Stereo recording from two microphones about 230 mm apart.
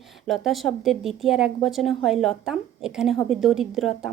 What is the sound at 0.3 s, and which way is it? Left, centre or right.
Speech, centre.